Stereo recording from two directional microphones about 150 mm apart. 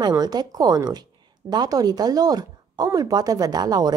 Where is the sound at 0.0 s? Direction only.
25° right (ahead or behind).